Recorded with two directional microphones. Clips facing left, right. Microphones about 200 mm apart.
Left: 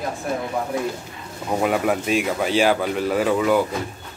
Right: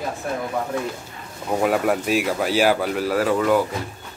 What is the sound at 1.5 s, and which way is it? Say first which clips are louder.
Speech: right 1 dB; centre (ahead or behind).